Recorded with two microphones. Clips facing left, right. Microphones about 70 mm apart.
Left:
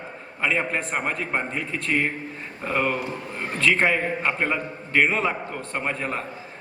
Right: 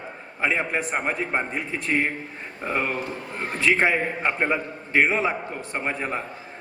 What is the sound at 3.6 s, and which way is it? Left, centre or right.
A man's voice, centre.